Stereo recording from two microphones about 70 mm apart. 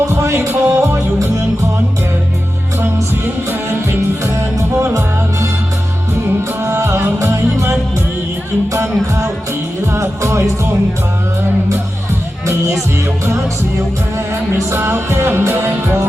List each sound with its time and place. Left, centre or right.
0.6 s music: right
4.8 s music: right
6.6 s music: right
8.7 s music: right
14.7 s music: right